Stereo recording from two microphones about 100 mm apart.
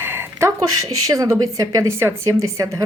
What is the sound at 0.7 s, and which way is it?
A woman's voice, 40° right (ahead or behind).